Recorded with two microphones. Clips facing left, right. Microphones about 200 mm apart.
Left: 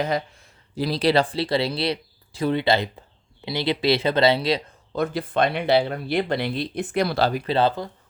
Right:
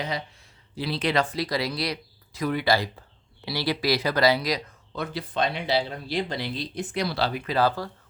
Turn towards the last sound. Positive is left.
turn(degrees=25)  # may be behind; listen again after turning